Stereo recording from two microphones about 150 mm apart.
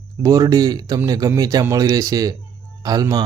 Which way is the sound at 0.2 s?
25° right (ahead or behind).